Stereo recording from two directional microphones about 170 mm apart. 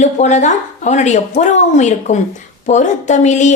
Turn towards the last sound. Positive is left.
turn(degrees=45)  # may be behind; listen again after turning